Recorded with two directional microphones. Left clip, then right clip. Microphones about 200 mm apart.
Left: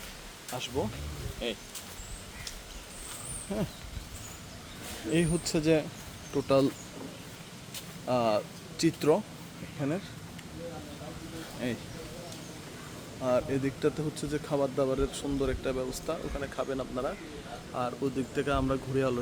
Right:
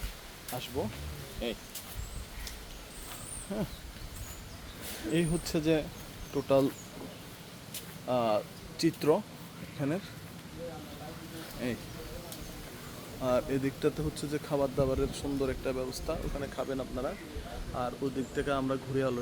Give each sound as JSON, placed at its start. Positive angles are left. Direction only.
{"t": 0.5, "sound": "speech", "side_deg": 15}
{"t": 3.5, "sound": "speech", "side_deg": 15}
{"t": 5.1, "sound": "speech", "side_deg": 15}
{"t": 8.0, "sound": "speech", "side_deg": 10}
{"t": 9.8, "sound": "speech", "side_deg": -5}
{"t": 11.6, "sound": "speech", "side_deg": 0}
{"t": 13.2, "sound": "speech", "side_deg": -5}